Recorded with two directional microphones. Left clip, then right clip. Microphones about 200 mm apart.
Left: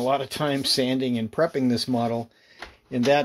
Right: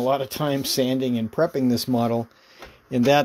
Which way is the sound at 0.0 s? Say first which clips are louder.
Right 1 dB; 25° right (ahead or behind).